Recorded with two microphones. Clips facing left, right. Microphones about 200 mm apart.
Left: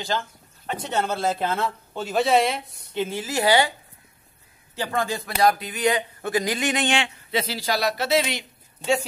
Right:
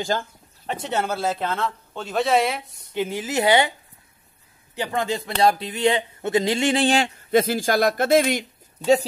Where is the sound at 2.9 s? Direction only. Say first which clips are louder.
Right 2 dB; 15° right (ahead or behind).